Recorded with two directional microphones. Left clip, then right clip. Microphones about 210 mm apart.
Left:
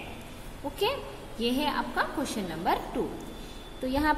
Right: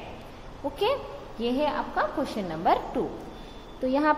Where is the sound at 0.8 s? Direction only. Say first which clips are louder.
Right 3 dB; 10° right (ahead or behind).